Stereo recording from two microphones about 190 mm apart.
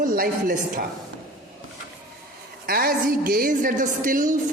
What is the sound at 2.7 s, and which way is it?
A woman's voice, 50° right (ahead or behind).